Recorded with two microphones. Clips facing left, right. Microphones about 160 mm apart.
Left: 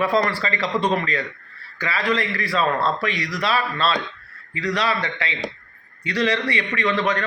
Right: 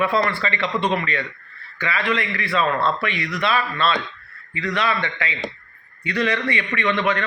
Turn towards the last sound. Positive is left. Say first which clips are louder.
# even
turn(degrees=35)  # may be behind; listen again after turning